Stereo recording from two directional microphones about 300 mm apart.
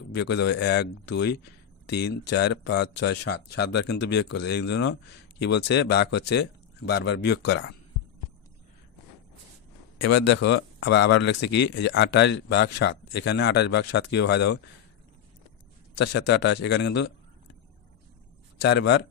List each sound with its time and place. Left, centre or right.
0.1 s speech: left
9.9 s speech: left
15.9 s speech: left
18.6 s speech: left